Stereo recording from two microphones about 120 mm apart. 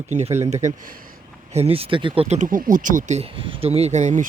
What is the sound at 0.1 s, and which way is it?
Speech, 70° right (ahead or behind).